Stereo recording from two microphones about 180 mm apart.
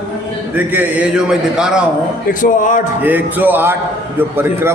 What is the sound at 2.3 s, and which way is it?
Speech, 45° left (ahead or behind).